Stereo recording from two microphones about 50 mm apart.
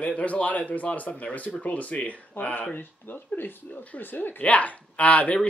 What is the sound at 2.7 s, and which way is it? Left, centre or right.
Speech, left.